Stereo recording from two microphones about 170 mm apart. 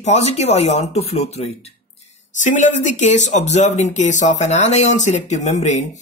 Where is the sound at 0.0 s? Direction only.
40° left (ahead or behind).